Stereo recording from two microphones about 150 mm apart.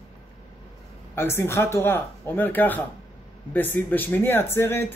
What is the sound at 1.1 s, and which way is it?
A man's voice, 15° left (ahead or behind).